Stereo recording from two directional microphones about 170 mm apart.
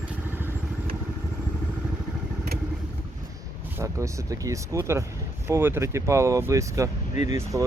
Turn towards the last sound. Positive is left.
turn(degrees=45)  # may be behind; listen again after turning